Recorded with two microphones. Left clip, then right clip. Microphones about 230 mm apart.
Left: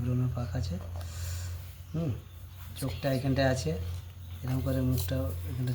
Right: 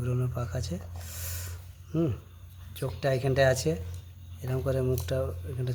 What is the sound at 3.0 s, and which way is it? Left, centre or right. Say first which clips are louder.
A man's voice: right 4 dB; right.